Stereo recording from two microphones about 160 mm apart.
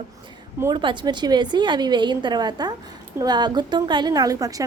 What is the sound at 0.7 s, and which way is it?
Speech, 30° right (ahead or behind).